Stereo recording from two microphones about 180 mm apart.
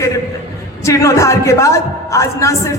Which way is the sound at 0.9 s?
15° left (ahead or behind).